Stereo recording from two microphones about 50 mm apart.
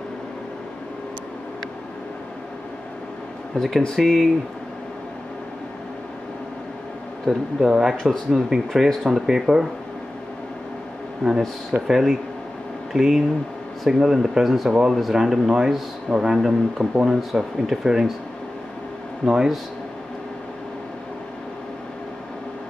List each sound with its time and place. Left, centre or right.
3.5 s a man's voice: centre
7.2 s a man's voice: centre
11.2 s a man's voice: centre
14.7 s a man's voice: centre
19.2 s a man's voice: centre